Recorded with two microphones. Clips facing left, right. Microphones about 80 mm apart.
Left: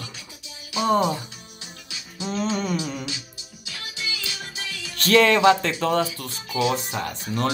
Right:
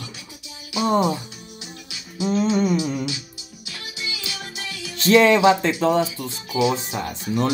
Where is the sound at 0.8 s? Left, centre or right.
Right.